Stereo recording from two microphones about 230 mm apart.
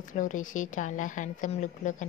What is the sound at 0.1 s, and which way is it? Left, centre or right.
A woman's voice, left.